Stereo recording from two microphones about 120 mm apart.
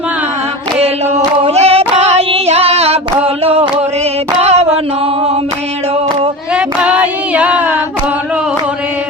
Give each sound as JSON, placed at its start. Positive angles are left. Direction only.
{"t": 1.5, "sound": "female singing", "side_deg": -60}
{"t": 3.2, "sound": "a sound", "side_deg": -55}
{"t": 6.5, "sound": "child singing", "side_deg": -10}